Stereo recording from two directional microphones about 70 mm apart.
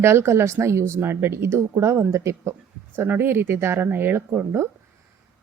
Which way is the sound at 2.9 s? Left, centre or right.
Right.